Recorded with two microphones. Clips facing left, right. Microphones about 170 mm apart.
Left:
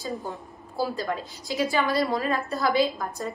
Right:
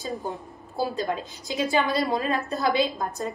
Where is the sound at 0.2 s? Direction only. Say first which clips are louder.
Right 2 dB; 20° right (ahead or behind).